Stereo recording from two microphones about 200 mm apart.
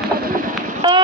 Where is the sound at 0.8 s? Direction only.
25° right (ahead or behind).